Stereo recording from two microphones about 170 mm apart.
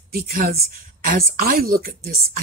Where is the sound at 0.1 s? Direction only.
60° right (ahead or behind).